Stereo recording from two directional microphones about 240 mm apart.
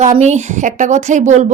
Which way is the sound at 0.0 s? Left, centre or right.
Right.